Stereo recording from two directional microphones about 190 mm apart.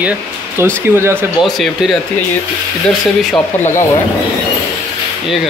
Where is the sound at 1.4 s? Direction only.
Centre (ahead or behind).